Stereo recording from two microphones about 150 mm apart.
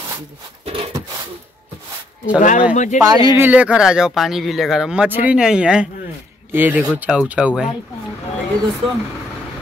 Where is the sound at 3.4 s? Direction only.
10° right (ahead or behind).